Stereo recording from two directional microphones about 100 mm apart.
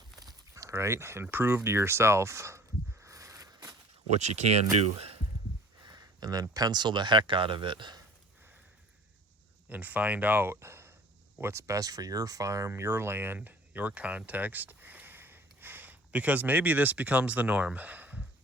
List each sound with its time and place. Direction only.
0.2 s a sound: 35° right (ahead or behind)
4.1 s speech: 90° right
5.8 s speech: 45° right (ahead or behind)
9.6 s speech: 15° right (ahead or behind)